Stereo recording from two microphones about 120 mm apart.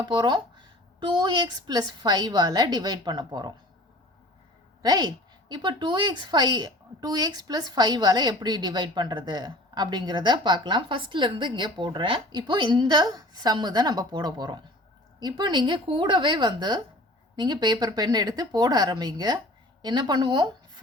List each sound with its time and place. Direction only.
0.0 s a woman's voice: 40° right (ahead or behind)
4.8 s a woman's voice: 35° right (ahead or behind)